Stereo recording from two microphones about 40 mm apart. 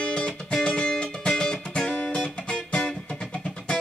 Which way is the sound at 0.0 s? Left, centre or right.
Left.